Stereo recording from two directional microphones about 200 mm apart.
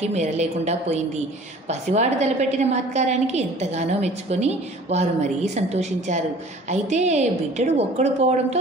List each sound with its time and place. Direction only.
0.1 s a woman's voice: 35° right (ahead or behind)